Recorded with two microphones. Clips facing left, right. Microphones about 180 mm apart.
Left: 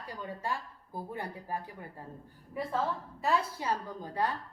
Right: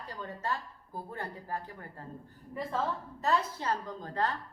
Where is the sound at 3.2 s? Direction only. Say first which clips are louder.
Even; 10° left (ahead or behind).